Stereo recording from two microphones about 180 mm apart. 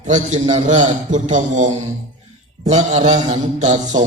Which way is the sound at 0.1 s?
40° right (ahead or behind).